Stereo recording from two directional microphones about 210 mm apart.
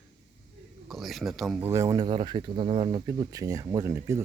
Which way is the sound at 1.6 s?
15° right (ahead or behind).